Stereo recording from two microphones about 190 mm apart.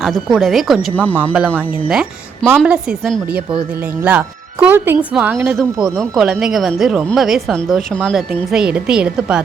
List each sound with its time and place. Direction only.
0.0 s a woman's voice: centre (ahead or behind)
1.1 s a woman's voice: 10° right (ahead or behind)